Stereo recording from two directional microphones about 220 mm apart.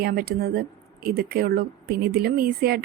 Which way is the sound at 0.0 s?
45° right (ahead or behind).